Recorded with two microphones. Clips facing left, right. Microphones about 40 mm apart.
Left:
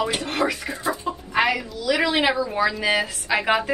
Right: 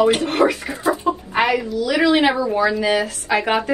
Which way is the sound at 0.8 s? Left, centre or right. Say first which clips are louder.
Right 8 dB; right.